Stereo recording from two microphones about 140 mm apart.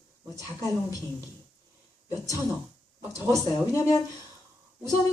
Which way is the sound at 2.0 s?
25° left (ahead or behind).